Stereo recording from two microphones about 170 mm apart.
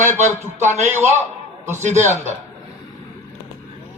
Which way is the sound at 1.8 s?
45° right (ahead or behind).